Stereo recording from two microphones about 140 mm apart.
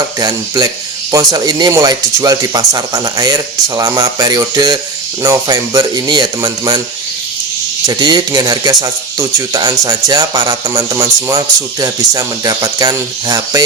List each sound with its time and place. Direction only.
0.2 s speech: 30° right (ahead or behind)
7.9 s speech: 30° right (ahead or behind)